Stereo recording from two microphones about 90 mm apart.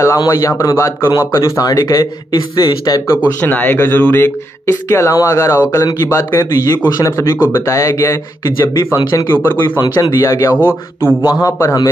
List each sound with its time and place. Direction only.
0.0 s speech: 35° left (ahead or behind)
3.3 s speech: 20° left (ahead or behind)
9.8 s a man's voice: 50° left (ahead or behind)
10.2 s speech: 35° left (ahead or behind)